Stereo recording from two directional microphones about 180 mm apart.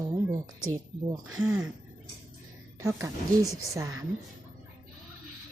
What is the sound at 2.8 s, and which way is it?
A woman's voice, 15° right (ahead or behind).